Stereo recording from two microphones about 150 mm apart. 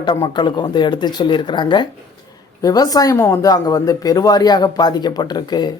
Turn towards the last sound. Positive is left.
turn(degrees=30)  # may be behind; listen again after turning